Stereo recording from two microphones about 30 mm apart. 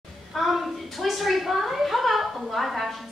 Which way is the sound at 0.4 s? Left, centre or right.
Centre.